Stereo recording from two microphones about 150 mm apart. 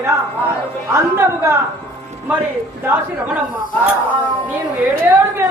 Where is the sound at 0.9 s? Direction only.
20° right (ahead or behind).